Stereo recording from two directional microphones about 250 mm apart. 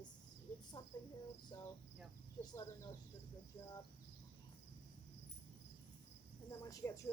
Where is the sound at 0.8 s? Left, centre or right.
Centre.